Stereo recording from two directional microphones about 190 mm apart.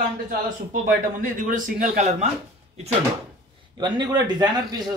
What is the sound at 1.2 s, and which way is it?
A man's voice, 45° right (ahead or behind).